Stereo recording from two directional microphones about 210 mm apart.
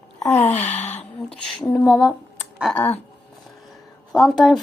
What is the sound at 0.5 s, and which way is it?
Gasp, 35° left (ahead or behind).